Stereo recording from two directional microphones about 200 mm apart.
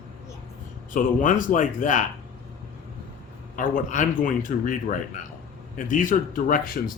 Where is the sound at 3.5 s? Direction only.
40° left (ahead or behind).